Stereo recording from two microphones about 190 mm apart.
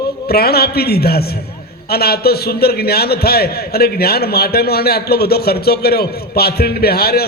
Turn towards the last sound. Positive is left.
turn(degrees=55)  # may be behind; listen again after turning